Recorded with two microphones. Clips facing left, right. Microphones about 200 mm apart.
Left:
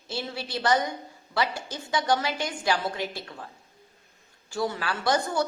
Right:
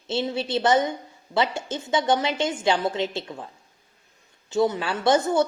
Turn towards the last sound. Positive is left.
turn(degrees=-25)  # may be behind; listen again after turning